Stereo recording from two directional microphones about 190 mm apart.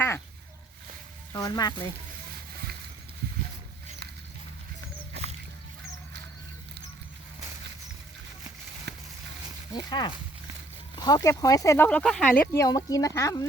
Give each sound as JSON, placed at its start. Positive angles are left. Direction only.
{"t": 1.3, "sound": "speech", "side_deg": 20}
{"t": 9.7, "sound": "speech", "side_deg": 20}